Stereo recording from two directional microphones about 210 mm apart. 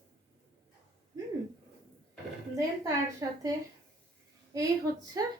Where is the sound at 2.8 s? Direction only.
15° right (ahead or behind).